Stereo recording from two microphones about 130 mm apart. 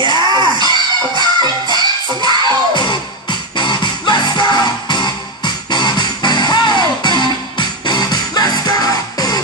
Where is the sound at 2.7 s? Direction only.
35° left (ahead or behind).